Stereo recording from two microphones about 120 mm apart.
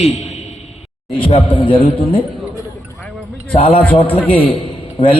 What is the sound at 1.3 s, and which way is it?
Speech, 45° left (ahead or behind).